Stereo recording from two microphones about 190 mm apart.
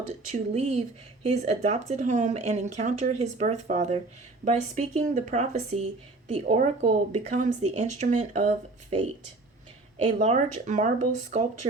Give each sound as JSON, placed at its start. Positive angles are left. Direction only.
{"t": 0.3, "sound": "speech", "side_deg": -35}
{"t": 10.2, "sound": "speech", "side_deg": -40}